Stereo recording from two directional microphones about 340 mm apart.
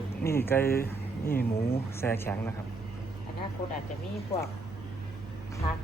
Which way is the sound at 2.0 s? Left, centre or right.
Centre.